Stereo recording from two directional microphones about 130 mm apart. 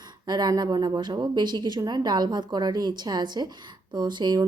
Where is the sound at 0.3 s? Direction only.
30° right (ahead or behind).